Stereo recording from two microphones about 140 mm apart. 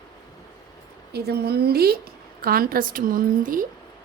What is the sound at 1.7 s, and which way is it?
A woman's voice, 90° right.